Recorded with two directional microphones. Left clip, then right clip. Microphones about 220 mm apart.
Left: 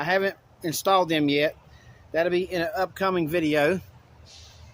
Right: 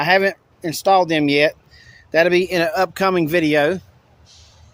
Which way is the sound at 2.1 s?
45° right (ahead or behind).